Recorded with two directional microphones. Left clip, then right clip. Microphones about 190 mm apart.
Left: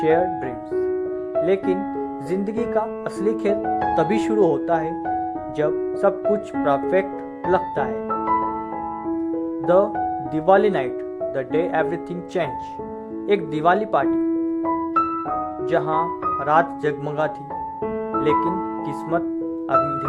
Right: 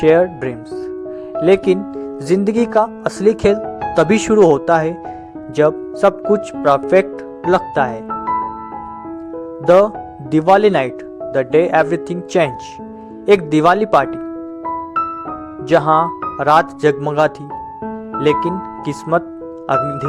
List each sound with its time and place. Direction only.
0.0 s speech: 25° right (ahead or behind)
9.6 s speech: 30° right (ahead or behind)
15.7 s speech: 30° right (ahead or behind)